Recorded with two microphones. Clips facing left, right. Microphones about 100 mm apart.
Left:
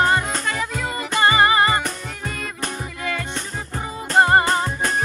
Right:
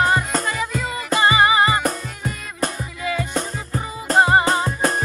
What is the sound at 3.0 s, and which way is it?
Music, 10° right (ahead or behind).